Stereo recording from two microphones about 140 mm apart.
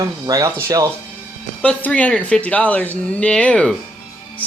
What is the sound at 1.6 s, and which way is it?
Speech, 10° left (ahead or behind).